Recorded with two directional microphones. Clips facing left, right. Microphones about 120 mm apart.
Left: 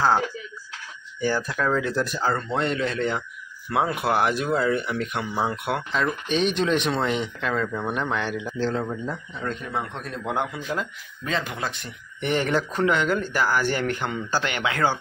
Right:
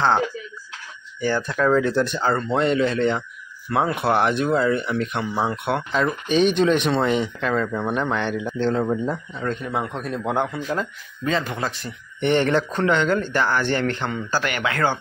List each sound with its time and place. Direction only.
1.2 s speech: 10° left (ahead or behind)
1.6 s speech: centre (ahead or behind)
8.8 s speech: 30° right (ahead or behind)
9.4 s speech: centre (ahead or behind)